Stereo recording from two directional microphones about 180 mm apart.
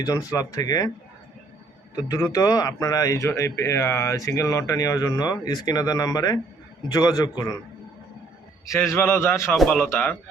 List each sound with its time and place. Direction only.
0.0 s speech: 20° left (ahead or behind)
2.0 s speech: 20° left (ahead or behind)
9.0 s a man's voice: 15° left (ahead or behind)